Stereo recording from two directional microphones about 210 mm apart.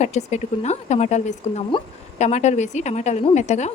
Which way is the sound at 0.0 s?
35° left (ahead or behind).